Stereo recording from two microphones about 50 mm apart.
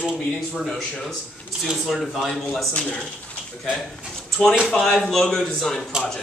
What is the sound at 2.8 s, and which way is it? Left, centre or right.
Speech, left.